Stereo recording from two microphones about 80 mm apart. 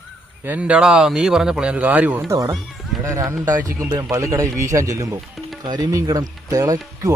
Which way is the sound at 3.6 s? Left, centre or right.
Right.